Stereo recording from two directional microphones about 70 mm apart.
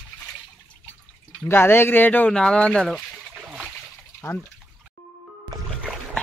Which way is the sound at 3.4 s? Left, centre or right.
Centre.